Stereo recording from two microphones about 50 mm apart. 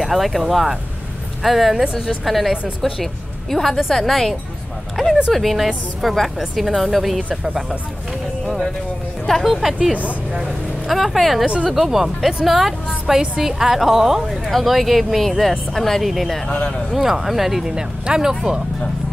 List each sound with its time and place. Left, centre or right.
0.0 s speech: centre
4.9 s a sound: centre
5.3 s speech: centre
7.2 s speech: right
9.3 s speech: centre
11.4 s speech: centre
11.7 s a woman's voice: centre
16.4 s speech: left
16.9 s speech: centre
17.6 s a woman's voice: centre